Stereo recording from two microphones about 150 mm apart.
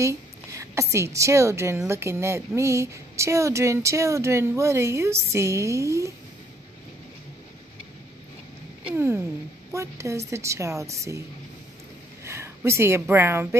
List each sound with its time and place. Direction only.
0.0 s a woman's voice: 20° right (ahead or behind)
8.8 s a woman's voice: 15° right (ahead or behind)
12.3 s speech: 20° right (ahead or behind)